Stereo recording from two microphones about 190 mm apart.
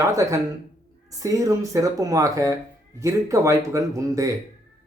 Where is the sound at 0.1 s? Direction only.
15° right (ahead or behind).